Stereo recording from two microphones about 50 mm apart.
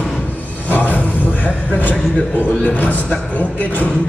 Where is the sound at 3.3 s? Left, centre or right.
Left.